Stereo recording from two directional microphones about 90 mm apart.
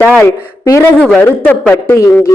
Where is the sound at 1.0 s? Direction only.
15° left (ahead or behind).